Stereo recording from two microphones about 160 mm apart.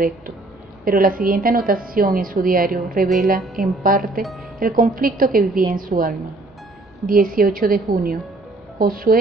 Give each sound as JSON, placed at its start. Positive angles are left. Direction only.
{"t": 0.8, "sound": "a woman's voice", "side_deg": -60}
{"t": 3.5, "sound": "a woman's voice", "side_deg": 0}
{"t": 3.8, "sound": "speech", "side_deg": -60}